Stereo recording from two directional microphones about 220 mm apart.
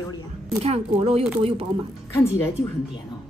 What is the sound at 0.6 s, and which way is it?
Speech, 25° right (ahead or behind).